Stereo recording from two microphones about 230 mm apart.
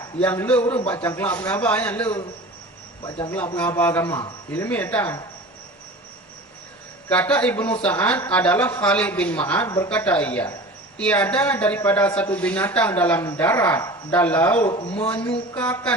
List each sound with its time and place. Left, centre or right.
0.0 s speech: centre
3.0 s speech: centre
3.3 s speech: centre
7.1 s speech: centre
14.8 s speech: left
15.0 s speech: centre